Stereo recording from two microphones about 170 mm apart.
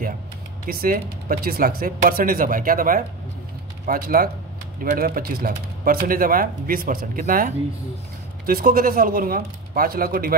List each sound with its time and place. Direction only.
0.7 s speech: 60° right (ahead or behind)